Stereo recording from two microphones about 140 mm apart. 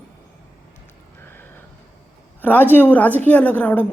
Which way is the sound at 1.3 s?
15° left (ahead or behind).